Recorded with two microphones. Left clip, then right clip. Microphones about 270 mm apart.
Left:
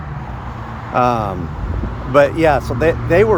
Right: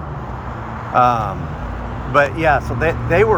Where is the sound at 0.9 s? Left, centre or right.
Centre.